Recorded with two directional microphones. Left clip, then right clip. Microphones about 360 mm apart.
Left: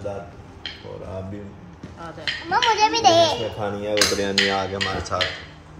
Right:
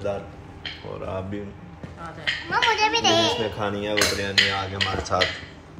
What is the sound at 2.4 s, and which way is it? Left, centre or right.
Speech, left.